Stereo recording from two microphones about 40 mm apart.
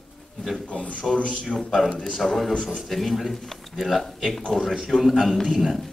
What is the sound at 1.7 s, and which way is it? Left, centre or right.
A man's voice, centre.